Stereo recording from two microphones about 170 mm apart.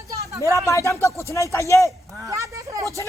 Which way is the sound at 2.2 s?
20° right (ahead or behind).